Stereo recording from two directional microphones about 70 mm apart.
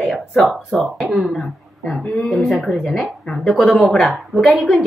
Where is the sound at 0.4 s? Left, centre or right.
Centre.